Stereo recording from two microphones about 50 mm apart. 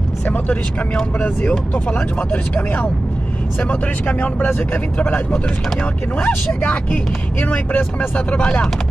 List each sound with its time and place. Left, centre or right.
1.9 s speech: left
8.4 s speech: left